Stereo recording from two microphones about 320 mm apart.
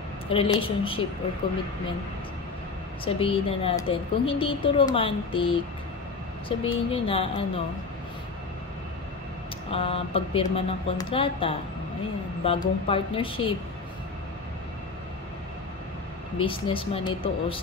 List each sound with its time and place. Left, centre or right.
0.3 s speech: centre
3.2 s speech: centre
6.6 s speech: centre
9.7 s speech: centre
16.3 s speech: centre